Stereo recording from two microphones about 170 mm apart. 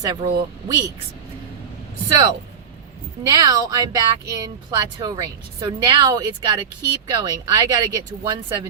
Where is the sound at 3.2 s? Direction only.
20° right (ahead or behind).